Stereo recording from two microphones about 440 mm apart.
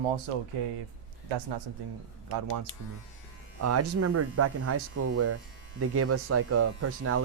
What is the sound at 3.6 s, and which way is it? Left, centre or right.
Speech, right.